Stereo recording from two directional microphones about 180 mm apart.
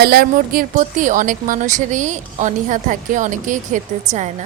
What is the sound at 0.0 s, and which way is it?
A woman's voice, 60° right (ahead or behind).